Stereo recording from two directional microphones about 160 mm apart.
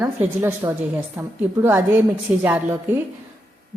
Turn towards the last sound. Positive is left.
turn(degrees=-15)  # may be behind; listen again after turning